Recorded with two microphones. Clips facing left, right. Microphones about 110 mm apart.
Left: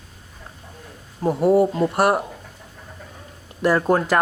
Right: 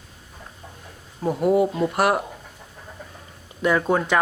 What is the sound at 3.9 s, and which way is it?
Speech, 5° left (ahead or behind).